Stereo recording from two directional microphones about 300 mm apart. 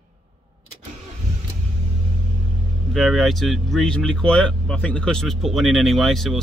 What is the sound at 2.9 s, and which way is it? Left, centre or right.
Speech, centre.